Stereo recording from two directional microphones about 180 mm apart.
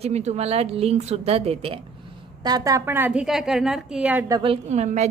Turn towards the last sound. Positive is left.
turn(degrees=-40)  # may be behind; listen again after turning